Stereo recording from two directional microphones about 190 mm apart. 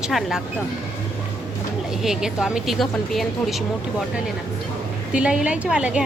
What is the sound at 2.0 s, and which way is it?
A woman's voice, 5° right (ahead or behind).